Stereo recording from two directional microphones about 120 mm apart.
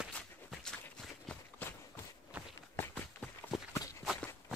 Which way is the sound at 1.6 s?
15° left (ahead or behind).